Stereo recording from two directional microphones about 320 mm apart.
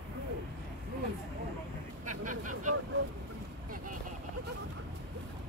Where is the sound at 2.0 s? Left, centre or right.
Right.